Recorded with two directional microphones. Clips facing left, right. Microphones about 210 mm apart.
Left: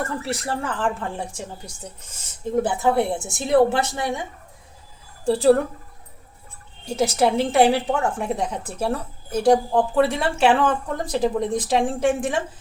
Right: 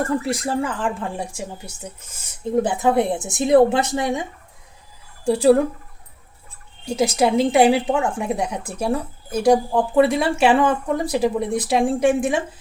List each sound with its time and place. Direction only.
0.0 s a woman's voice: 15° right (ahead or behind)
6.8 s a woman's voice: 15° right (ahead or behind)